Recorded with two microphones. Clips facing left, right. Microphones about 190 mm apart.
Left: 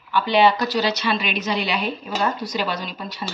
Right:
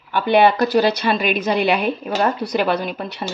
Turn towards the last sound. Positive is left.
turn(degrees=-55)  # may be behind; listen again after turning